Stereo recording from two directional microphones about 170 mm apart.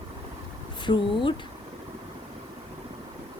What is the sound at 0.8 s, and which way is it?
Speech, 30° left (ahead or behind).